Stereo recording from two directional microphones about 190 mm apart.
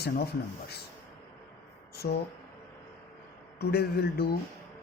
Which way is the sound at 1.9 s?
55° left (ahead or behind).